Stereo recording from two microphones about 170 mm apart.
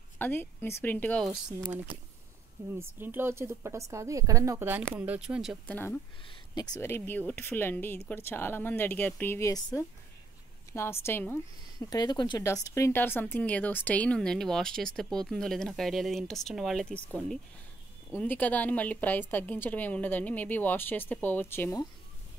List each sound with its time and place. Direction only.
0.2 s a woman's voice: 10° left (ahead or behind)
2.7 s a woman's voice: 10° right (ahead or behind)
5.7 s a woman's voice: 10° left (ahead or behind)
6.2 s a woman's voice: 25° left (ahead or behind); by 17.0 s 5° left (ahead or behind)
18.1 s a woman's voice: 10° left (ahead or behind)